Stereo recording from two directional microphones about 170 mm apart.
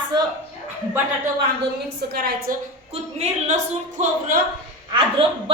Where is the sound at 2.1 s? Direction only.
65° right (ahead or behind).